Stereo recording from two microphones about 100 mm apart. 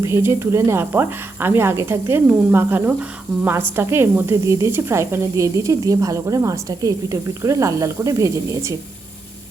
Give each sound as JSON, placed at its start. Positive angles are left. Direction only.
{"t": 0.0, "sound": "speech", "side_deg": -25}